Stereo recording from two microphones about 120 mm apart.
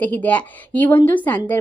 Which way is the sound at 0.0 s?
15° left (ahead or behind).